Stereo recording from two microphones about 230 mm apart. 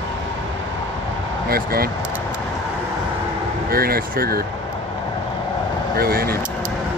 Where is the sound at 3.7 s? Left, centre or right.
Right.